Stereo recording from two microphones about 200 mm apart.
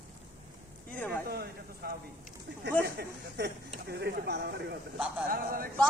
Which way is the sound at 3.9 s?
55° right (ahead or behind).